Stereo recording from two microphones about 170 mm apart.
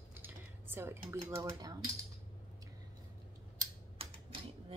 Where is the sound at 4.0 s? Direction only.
35° right (ahead or behind).